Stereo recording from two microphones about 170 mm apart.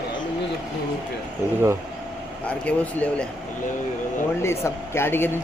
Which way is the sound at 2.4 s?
5° left (ahead or behind).